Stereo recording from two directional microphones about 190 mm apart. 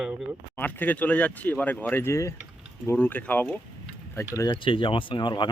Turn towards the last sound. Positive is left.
turn(degrees=25)  # may be behind; listen again after turning